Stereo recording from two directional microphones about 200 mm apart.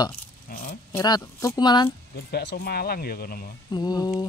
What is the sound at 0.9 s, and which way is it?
Speech, 15° left (ahead or behind).